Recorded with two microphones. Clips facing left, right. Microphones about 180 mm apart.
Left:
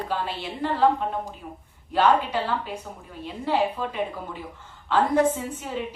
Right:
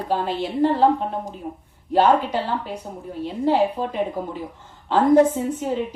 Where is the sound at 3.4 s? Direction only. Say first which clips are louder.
Right 5 dB; 45° right (ahead or behind).